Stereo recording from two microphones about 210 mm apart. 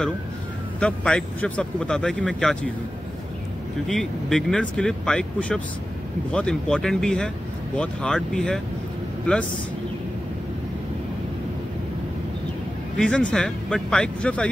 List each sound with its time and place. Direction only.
0.7 s speech: 5° left (ahead or behind)
3.8 s speech: centre (ahead or behind)
12.9 s speech: 5° left (ahead or behind)